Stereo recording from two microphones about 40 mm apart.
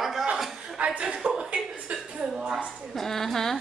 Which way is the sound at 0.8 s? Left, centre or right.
Right.